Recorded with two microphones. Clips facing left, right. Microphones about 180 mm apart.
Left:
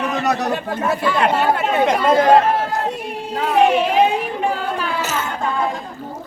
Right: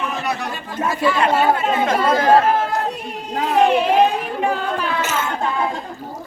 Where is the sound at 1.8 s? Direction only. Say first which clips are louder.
Left 3 dB; 20° left (ahead or behind).